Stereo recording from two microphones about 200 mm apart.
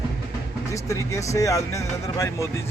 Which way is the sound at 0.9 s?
15° left (ahead or behind).